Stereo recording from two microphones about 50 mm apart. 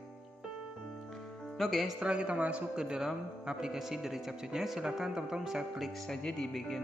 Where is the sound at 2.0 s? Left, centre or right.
Right.